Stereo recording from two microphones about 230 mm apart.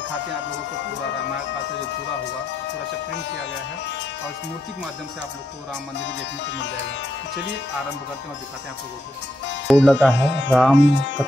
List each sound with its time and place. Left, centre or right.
9.7 s speech: centre
10.1 s speech: left
10.5 s speech: centre
10.8 s speech: left